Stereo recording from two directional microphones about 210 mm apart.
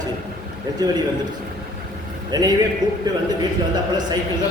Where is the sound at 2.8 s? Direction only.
35° right (ahead or behind).